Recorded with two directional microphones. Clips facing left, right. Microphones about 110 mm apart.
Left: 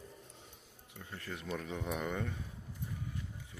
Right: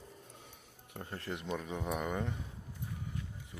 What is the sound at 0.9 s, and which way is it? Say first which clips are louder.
Speech: right 4 dB; 45° right (ahead or behind).